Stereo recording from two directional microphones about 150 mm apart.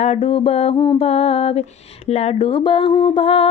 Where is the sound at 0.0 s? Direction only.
45° left (ahead or behind).